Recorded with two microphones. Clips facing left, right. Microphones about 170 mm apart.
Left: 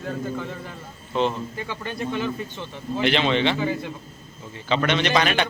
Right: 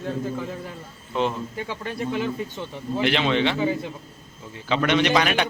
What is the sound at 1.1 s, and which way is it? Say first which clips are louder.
A man's voice: left 1 dB; 5° right (ahead or behind).